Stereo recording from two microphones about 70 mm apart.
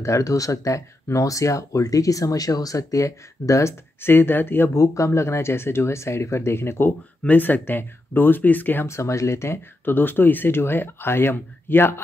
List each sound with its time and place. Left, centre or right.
0.0 s speech: left
4.0 s speech: left
4.7 s speech: left
7.2 s speech: left
8.8 s speech: left